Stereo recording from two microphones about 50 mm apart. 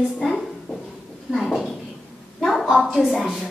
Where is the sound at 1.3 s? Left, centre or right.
Centre.